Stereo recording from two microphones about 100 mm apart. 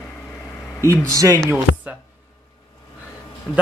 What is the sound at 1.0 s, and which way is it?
Speech, 35° right (ahead or behind).